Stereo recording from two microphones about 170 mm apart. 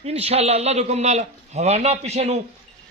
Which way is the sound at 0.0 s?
35° right (ahead or behind).